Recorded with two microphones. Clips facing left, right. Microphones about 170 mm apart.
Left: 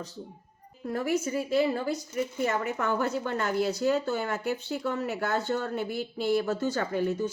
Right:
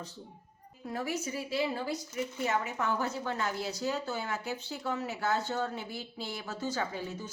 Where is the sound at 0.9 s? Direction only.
50° left (ahead or behind).